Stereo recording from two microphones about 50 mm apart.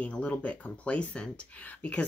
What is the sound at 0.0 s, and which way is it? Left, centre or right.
Speech, left.